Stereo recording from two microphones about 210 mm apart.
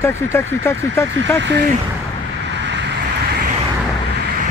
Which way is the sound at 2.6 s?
55° right (ahead or behind).